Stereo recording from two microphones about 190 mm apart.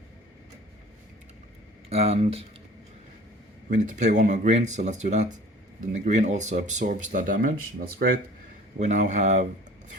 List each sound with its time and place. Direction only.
1.9 s speech: 30° right (ahead or behind)
3.7 s speech: 40° right (ahead or behind)